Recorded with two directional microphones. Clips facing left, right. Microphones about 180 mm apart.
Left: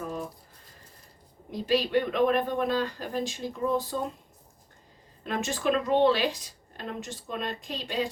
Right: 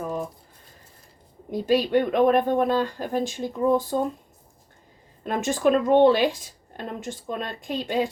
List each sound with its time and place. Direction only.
1.5 s speech: 50° right (ahead or behind)
5.2 s speech: 50° right (ahead or behind)